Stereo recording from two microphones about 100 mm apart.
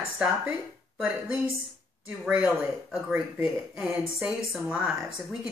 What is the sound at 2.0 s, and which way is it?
A woman's voice, 10° right (ahead or behind).